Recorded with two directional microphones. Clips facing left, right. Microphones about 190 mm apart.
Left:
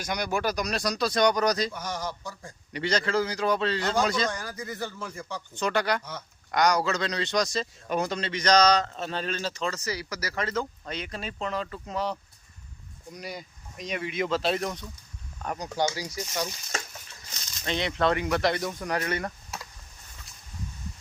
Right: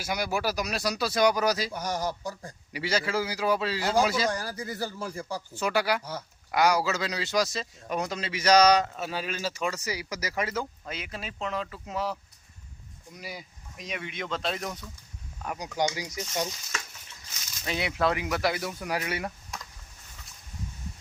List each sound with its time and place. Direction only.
0.0 s a man's voice: 5° right (ahead or behind)
1.7 s speech: 40° right (ahead or behind)
2.7 s speech: 5° right (ahead or behind)
4.3 s speech: 35° right (ahead or behind)
5.5 s a man's voice: 5° right (ahead or behind)
13.1 s a man's voice: 5° right (ahead or behind); by 16.5 s 20° right (ahead or behind)
17.7 s speech: 5° right (ahead or behind)